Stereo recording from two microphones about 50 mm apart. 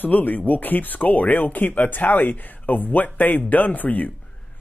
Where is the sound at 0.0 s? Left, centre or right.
Left.